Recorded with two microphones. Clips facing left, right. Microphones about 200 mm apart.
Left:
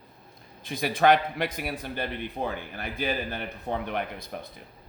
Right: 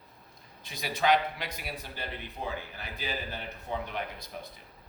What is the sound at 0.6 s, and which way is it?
A man's voice, 55° left (ahead or behind).